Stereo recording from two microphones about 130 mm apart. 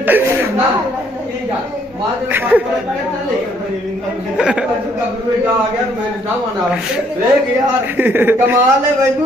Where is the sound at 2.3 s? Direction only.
15° right (ahead or behind).